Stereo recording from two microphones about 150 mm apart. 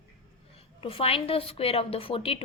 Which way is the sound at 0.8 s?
40° left (ahead or behind).